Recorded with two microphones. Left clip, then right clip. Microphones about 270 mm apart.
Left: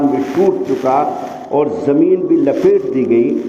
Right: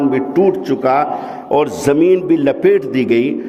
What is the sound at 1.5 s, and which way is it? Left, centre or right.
A man's voice, right.